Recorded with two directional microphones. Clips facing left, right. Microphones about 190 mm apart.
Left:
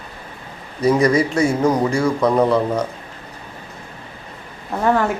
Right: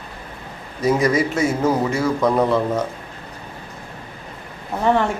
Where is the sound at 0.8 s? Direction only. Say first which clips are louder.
Left 2 dB; centre (ahead or behind).